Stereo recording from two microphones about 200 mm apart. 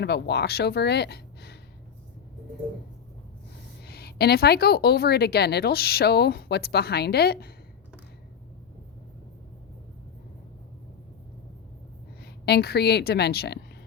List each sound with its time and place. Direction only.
0.0 s speech: 55° left (ahead or behind)
3.8 s a woman's voice: 50° left (ahead or behind)
12.2 s a woman's voice: 55° left (ahead or behind)